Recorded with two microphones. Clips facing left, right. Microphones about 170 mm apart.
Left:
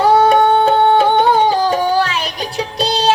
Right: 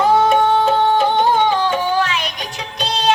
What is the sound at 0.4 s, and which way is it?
Music, 60° left (ahead or behind).